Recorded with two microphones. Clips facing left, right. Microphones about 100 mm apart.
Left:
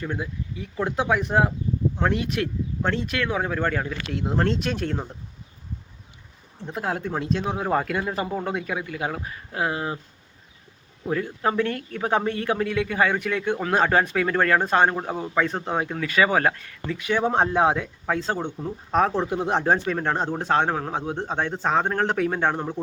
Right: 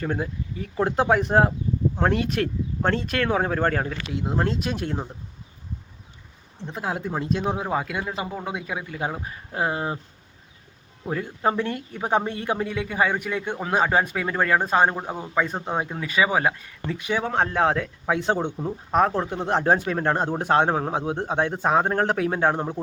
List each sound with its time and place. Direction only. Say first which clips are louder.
0.0 s speech: right 3 dB; 40° right (ahead or behind)
4.1 s speech: left 2 dB; 5° right (ahead or behind)
6.6 s speech: left 1 dB; centre (ahead or behind)
7.4 s speech: left 1 dB; 15° right (ahead or behind)
11.1 s speech: even; 20° right (ahead or behind)
17.2 s speech: left 2 dB; 20° left (ahead or behind)
18.0 s speech: right 3 dB; 15° right (ahead or behind); by 19.6 s 5° left (ahead or behind)
19.6 s speech: right 1 dB; 5° right (ahead or behind)